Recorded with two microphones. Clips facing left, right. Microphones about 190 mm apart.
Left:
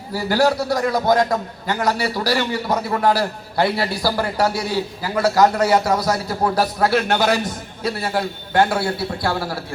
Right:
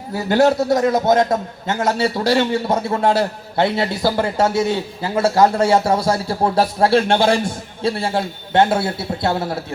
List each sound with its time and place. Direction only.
0.1 s a man's voice: 20° right (ahead or behind)